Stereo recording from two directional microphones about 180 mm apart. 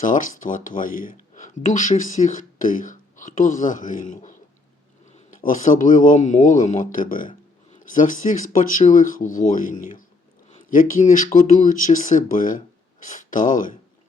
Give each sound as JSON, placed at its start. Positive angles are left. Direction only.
{"t": 0.0, "sound": "speech", "side_deg": 45}